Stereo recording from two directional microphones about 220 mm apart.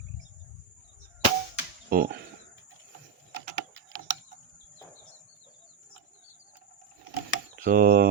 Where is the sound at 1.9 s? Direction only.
40° right (ahead or behind).